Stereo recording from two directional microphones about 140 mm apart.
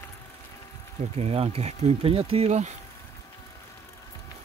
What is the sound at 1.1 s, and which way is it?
Speech, 45° right (ahead or behind).